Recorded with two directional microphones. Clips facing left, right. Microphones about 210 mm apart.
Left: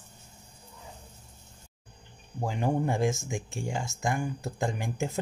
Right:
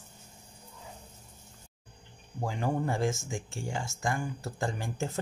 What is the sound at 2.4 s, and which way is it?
Speech, 20° left (ahead or behind).